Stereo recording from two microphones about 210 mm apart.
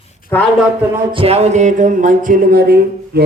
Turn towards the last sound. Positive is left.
turn(degrees=-50)  # may be behind; listen again after turning